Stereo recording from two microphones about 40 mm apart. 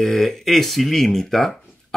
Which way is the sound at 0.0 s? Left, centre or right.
Centre.